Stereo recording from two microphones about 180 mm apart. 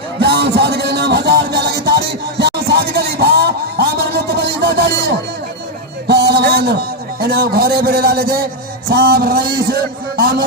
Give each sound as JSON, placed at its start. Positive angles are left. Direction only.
{"t": 0.2, "sound": "music", "side_deg": -65}
{"t": 6.1, "sound": "a sound", "side_deg": -65}
{"t": 8.9, "sound": "a man's voice", "side_deg": -60}